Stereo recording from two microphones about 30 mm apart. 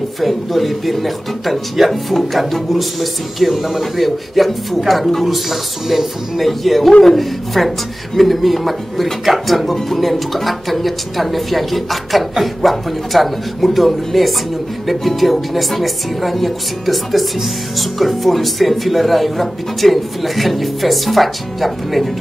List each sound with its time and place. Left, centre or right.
0.2 s speech: centre
6.4 s speech: centre